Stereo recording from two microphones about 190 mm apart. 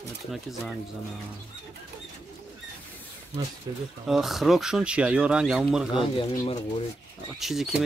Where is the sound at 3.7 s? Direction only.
20° right (ahead or behind).